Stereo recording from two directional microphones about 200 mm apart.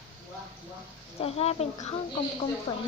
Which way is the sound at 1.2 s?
30° left (ahead or behind).